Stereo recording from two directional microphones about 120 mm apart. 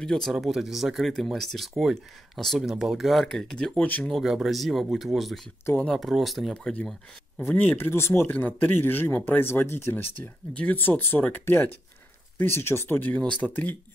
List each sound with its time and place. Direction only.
0.0 s speech: 5° left (ahead or behind)
4.1 s speech: 5° right (ahead or behind); by 13.7 s 15° left (ahead or behind)